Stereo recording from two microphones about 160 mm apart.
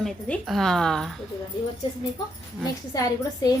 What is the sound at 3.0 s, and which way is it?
Speech, 25° left (ahead or behind).